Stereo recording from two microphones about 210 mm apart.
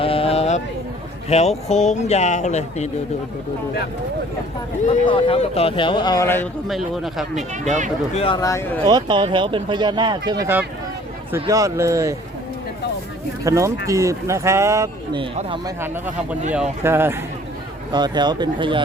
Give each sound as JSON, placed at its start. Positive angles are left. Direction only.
{"t": 0.0, "sound": "a sound", "side_deg": 25}
{"t": 1.3, "sound": "speech", "side_deg": 30}
{"t": 4.9, "sound": "a man's voice", "side_deg": 25}
{"t": 6.7, "sound": "speech", "side_deg": 0}
{"t": 8.1, "sound": "a man's voice", "side_deg": 25}
{"t": 8.4, "sound": "speech", "side_deg": 15}
{"t": 8.9, "sound": "speech", "side_deg": -20}
{"t": 13.4, "sound": "speech", "side_deg": -15}
{"t": 16.5, "sound": "speech", "side_deg": -10}